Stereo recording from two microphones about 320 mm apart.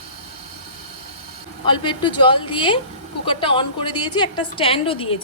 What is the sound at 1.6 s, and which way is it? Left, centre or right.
A woman's voice, centre.